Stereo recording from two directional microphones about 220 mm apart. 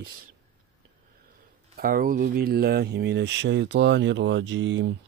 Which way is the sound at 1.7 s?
40° right (ahead or behind).